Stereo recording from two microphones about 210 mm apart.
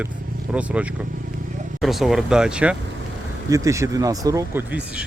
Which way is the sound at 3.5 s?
15° right (ahead or behind).